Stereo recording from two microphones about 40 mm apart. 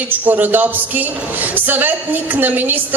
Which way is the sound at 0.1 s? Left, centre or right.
Right.